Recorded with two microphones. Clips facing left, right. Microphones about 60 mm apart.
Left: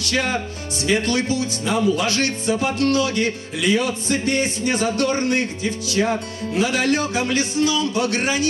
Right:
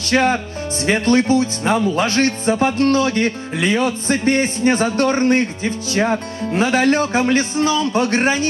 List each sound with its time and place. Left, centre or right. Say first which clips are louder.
0.1 s speech: right 7 dB; right